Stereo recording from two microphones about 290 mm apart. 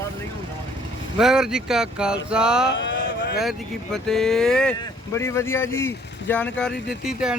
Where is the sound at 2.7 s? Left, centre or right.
Left.